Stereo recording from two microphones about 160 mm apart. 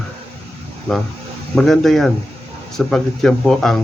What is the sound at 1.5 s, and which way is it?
Speech, 5° left (ahead or behind).